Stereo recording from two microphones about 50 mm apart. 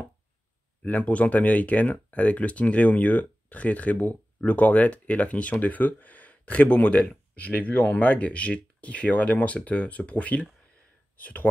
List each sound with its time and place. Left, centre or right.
0.8 s speech: left